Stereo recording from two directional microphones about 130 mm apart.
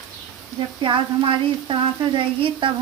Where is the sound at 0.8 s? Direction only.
40° right (ahead or behind).